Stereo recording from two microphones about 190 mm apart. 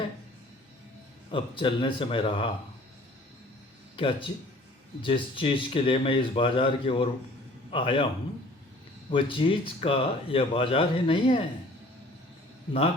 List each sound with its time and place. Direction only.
1.3 s speech: 25° left (ahead or behind)
3.9 s speech: 25° left (ahead or behind)
9.0 s speech: 25° left (ahead or behind)